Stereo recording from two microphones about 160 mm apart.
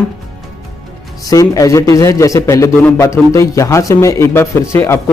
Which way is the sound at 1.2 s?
20° left (ahead or behind).